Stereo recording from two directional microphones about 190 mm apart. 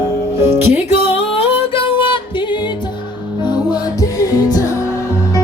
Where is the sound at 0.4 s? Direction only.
15° right (ahead or behind).